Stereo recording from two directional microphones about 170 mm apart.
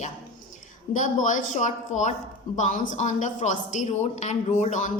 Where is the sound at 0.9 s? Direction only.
45° left (ahead or behind).